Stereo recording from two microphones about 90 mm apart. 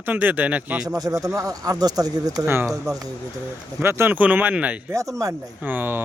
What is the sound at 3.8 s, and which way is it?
Speech, 25° right (ahead or behind).